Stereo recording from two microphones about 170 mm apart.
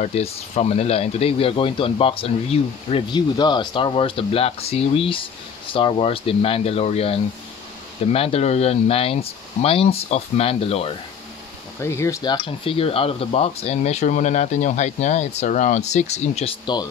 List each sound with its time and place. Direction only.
0.0 s speech: 40° left (ahead or behind)
11.8 s speech: 15° left (ahead or behind); by 16.5 s 40° left (ahead or behind)